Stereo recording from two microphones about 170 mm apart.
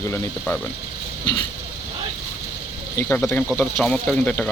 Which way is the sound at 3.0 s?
15° left (ahead or behind).